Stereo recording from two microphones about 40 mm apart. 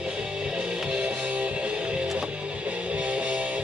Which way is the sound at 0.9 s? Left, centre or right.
Right.